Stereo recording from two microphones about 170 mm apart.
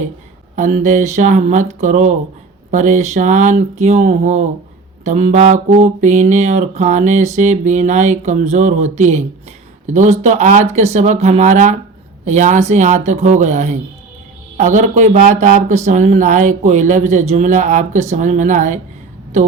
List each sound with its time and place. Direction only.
0.5 s mantra: 45° right (ahead or behind)